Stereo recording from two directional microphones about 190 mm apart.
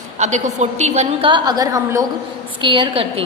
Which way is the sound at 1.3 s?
20° right (ahead or behind).